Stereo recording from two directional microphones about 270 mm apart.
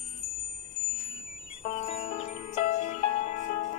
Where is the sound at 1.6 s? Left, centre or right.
Left.